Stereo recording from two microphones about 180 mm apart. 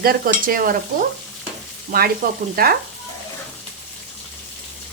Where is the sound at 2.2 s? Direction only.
50° right (ahead or behind).